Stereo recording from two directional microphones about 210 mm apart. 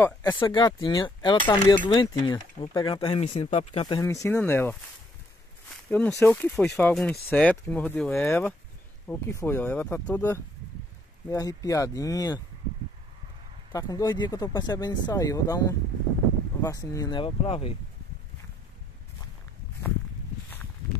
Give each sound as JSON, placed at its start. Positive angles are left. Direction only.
{"t": 0.0, "sound": "speech", "side_deg": 10}
{"t": 0.4, "sound": "speech", "side_deg": 20}
{"t": 4.0, "sound": "speech", "side_deg": 15}
{"t": 5.9, "sound": "speech", "side_deg": 10}
{"t": 13.7, "sound": "speech", "side_deg": 15}